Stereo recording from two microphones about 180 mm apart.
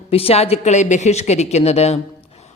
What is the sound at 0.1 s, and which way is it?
Speech, 35° left (ahead or behind).